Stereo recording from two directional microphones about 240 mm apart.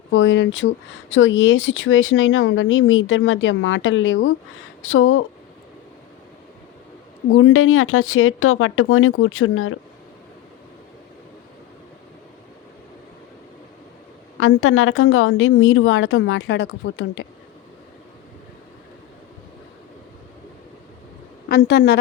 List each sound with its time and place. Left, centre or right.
0.1 s speech: left
7.3 s speech: left
14.3 s speech: left
21.5 s speech: left